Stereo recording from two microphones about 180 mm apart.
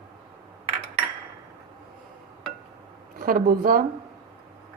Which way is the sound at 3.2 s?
55° right (ahead or behind).